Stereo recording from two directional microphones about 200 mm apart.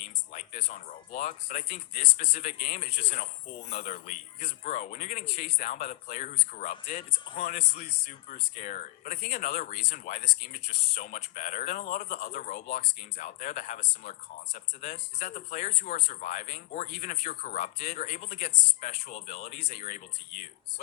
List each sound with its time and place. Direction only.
0.3 s speech: 40° left (ahead or behind)